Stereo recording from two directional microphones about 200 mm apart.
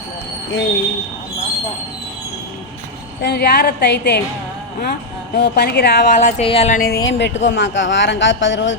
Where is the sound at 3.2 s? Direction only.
55° left (ahead or behind).